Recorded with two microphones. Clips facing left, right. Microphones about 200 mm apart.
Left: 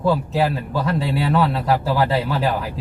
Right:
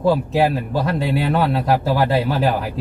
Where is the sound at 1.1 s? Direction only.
50° right (ahead or behind).